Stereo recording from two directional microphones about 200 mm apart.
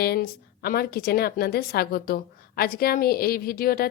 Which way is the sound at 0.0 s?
50° left (ahead or behind).